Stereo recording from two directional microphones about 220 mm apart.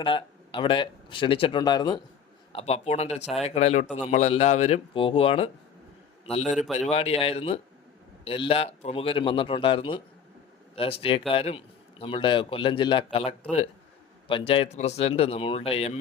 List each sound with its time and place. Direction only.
0.0 s a man's voice: 20° left (ahead or behind)